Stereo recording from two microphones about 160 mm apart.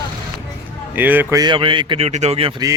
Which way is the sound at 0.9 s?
10° right (ahead or behind).